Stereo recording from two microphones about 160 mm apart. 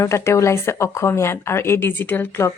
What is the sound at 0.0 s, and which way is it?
Speech, 15° left (ahead or behind).